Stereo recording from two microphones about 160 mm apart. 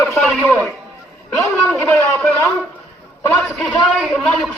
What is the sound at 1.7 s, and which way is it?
A man's voice, 5° left (ahead or behind).